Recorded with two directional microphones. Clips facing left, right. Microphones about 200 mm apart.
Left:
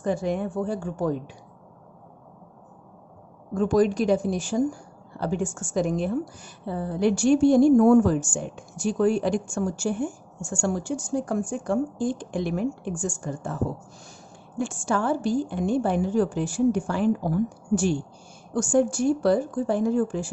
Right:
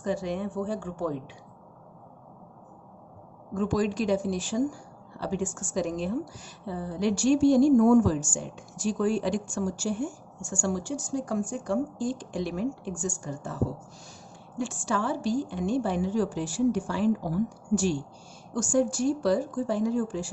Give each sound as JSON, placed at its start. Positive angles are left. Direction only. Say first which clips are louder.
{"t": 0.0, "sound": "a woman's voice", "louder": "left 4 dB", "side_deg": 50}
{"t": 3.5, "sound": "a woman's voice", "louder": "left 6 dB", "side_deg": 45}
{"t": 14.6, "sound": "a woman's voice", "louder": "left 3 dB", "side_deg": 50}